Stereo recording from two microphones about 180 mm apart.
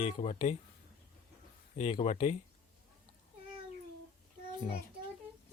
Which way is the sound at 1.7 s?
35° left (ahead or behind).